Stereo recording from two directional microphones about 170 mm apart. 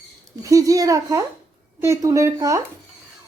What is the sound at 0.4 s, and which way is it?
Speech, 20° right (ahead or behind).